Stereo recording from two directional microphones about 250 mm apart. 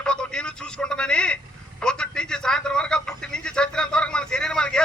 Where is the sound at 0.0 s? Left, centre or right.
Centre.